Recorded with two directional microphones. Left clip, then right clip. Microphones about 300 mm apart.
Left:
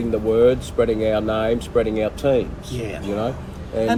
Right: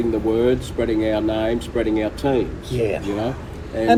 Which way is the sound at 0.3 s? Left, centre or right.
Centre.